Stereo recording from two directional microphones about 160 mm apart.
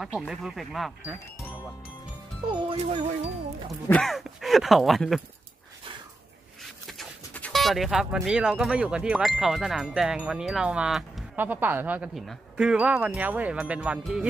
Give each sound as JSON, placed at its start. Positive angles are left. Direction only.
{"t": 0.3, "sound": "speech", "side_deg": 0}
{"t": 2.4, "sound": "speech", "side_deg": -30}
{"t": 2.8, "sound": "speech", "side_deg": -45}
{"t": 3.9, "sound": "speech", "side_deg": 0}
{"t": 6.9, "sound": "speech", "side_deg": 5}